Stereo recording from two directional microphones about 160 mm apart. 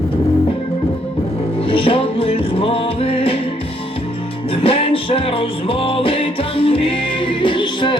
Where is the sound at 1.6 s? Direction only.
35° left (ahead or behind).